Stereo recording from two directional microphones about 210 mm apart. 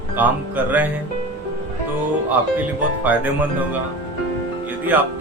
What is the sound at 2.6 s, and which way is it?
Music, 10° right (ahead or behind).